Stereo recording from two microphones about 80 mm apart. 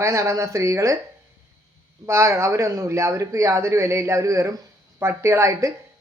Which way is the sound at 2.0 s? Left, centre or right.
Right.